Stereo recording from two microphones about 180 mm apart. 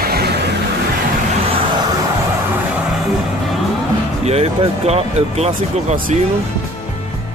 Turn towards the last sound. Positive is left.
turn(degrees=-35)  # may be behind; listen again after turning